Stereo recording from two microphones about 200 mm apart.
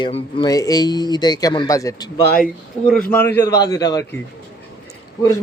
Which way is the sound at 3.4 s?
15° left (ahead or behind).